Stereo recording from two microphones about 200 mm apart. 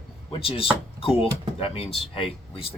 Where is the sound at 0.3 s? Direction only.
30° left (ahead or behind).